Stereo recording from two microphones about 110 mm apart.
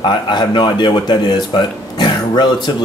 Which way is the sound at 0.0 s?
45° left (ahead or behind).